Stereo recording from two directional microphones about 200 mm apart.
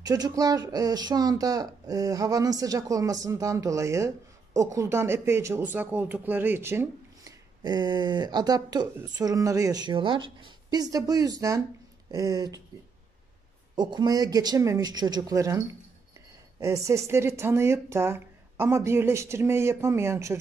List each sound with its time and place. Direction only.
0.0 s speech: 20° right (ahead or behind)
13.7 s speech: 20° right (ahead or behind)